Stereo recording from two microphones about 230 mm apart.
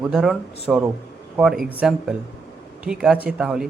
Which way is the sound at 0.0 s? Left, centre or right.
Centre.